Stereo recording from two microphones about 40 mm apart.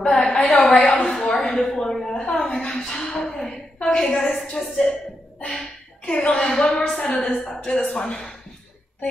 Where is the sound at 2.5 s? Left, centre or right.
Centre.